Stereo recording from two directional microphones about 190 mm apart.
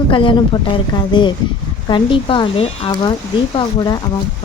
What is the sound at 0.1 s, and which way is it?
Speech, 25° left (ahead or behind).